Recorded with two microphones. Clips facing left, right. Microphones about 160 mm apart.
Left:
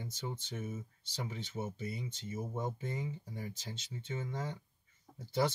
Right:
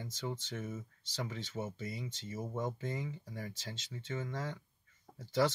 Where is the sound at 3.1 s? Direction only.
15° left (ahead or behind).